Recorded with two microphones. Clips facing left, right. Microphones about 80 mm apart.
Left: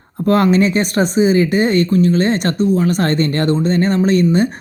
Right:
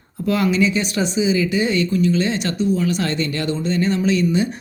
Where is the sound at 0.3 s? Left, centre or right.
Left.